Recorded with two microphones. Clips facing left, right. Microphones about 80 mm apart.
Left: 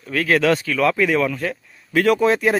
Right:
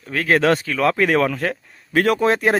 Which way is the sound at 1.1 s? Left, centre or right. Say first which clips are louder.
Right 2 dB; right.